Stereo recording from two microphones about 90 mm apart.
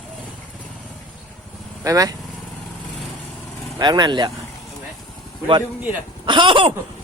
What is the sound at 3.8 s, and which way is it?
Speech, 50° right (ahead or behind).